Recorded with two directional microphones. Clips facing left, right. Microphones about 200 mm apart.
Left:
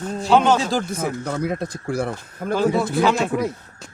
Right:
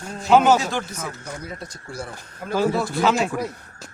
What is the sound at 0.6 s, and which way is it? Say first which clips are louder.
Speech: left 4 dB; 35° left (ahead or behind).